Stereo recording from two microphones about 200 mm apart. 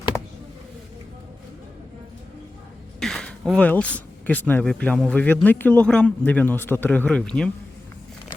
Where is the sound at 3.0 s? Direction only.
5° left (ahead or behind).